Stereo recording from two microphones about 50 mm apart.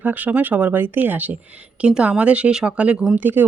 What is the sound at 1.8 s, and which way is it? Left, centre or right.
Speech, right.